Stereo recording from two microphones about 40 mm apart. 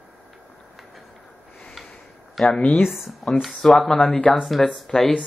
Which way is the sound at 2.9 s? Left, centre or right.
Centre.